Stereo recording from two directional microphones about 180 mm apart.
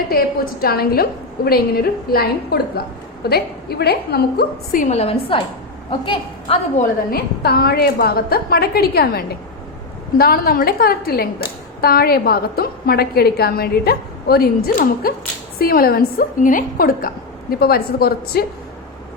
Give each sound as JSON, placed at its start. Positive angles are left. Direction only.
{"t": 0.6, "sound": "a woman's voice", "side_deg": 60}
{"t": 7.1, "sound": "a woman's voice", "side_deg": 60}